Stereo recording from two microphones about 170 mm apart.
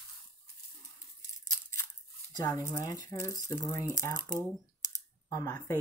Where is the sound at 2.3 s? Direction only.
20° left (ahead or behind).